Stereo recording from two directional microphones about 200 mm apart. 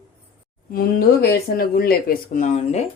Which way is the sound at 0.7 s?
50° left (ahead or behind).